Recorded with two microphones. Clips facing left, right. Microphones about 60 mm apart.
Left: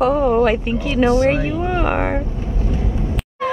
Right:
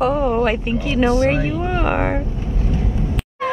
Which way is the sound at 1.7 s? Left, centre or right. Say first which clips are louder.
Left 2 dB; left.